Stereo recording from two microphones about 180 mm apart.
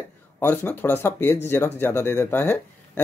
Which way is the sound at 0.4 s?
10° left (ahead or behind).